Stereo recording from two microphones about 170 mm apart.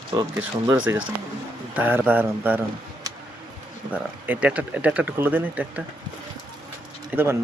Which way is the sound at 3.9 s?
10° right (ahead or behind).